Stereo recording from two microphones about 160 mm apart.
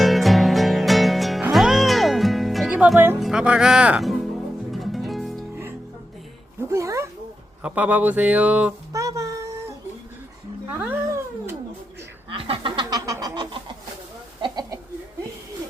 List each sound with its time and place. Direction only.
0.0 s music: centre (ahead or behind)
3.2 s speech: 5° right (ahead or behind)
4.7 s music: centre (ahead or behind)
6.6 s speech: 20° right (ahead or behind)
8.9 s a sound: 20° right (ahead or behind)
10.7 s cat: 15° right (ahead or behind)
12.3 s speech: 35° right (ahead or behind)
14.4 s a sound: 25° right (ahead or behind)